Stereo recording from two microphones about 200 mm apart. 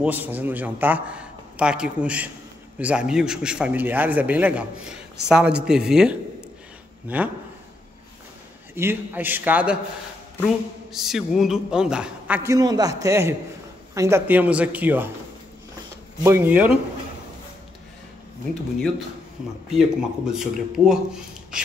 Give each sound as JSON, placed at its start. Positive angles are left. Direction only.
{"t": 0.0, "sound": "a man's voice", "side_deg": -10}
{"t": 8.7, "sound": "a man's voice", "side_deg": -10}
{"t": 12.4, "sound": "a man's voice", "side_deg": -20}
{"t": 16.3, "sound": "a man's voice", "side_deg": -10}
{"t": 19.7, "sound": "a man's voice", "side_deg": -5}